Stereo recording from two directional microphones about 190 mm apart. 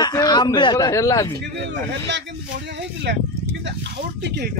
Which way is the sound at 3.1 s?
65° right (ahead or behind).